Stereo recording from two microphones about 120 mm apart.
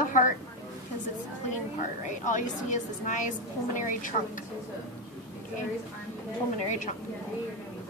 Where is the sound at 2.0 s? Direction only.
90° left.